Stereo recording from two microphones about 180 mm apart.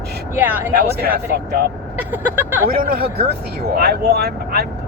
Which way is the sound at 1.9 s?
10° right (ahead or behind).